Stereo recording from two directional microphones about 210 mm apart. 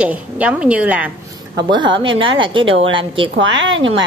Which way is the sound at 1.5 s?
20° right (ahead or behind).